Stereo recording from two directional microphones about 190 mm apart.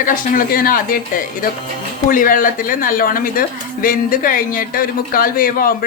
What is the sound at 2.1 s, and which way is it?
Speech, 45° left (ahead or behind).